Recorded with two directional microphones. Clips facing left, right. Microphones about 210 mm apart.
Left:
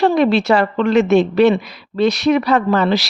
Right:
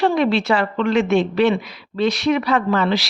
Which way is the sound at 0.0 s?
40° left (ahead or behind).